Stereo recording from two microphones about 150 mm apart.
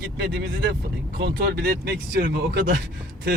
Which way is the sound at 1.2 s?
90° right.